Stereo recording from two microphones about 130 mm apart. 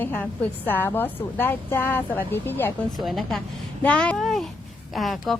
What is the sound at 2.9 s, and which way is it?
A woman's voice, centre (ahead or behind).